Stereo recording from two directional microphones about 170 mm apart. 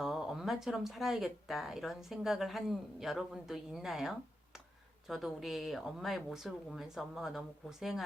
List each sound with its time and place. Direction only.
0.0 s speech: centre (ahead or behind)